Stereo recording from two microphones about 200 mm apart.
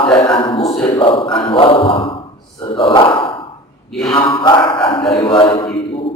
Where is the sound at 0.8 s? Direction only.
25° left (ahead or behind).